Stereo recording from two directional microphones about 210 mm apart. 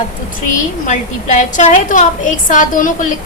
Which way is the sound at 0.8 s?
35° left (ahead or behind).